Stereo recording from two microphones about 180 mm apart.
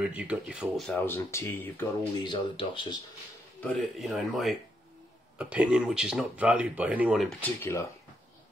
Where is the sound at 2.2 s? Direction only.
25° left (ahead or behind).